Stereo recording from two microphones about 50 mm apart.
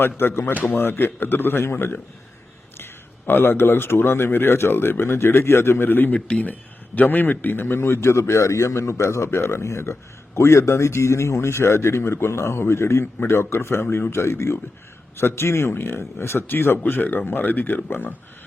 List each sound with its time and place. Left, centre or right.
0.2 s speech: left
6.1 s speech: left
6.4 s a man's voice: left
14.1 s a man's voice: left
16.9 s speech: left